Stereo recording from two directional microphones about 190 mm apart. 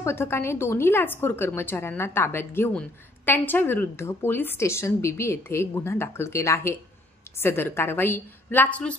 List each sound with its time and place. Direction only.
0.0 s a woman's voice: 15° left (ahead or behind)